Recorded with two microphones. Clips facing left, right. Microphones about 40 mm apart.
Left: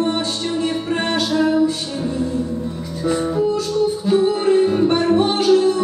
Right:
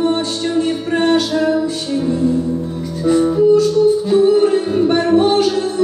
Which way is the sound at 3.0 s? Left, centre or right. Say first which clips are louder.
Right 6 dB; centre.